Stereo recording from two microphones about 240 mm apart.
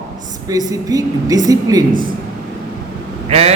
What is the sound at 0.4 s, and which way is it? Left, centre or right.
A man's voice, centre.